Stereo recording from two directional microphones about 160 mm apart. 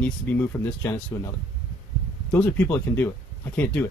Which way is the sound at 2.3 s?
10° left (ahead or behind).